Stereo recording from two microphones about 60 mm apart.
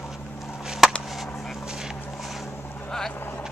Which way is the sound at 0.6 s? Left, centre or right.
Centre.